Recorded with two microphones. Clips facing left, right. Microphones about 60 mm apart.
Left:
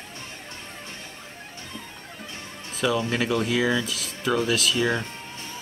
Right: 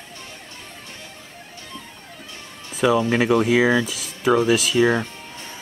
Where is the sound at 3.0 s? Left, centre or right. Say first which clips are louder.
Right 6 dB; right.